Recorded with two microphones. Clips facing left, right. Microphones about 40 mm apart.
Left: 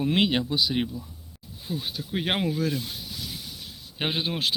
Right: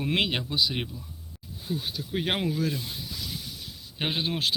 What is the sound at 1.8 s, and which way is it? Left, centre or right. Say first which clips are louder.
Speech: left 2 dB; centre.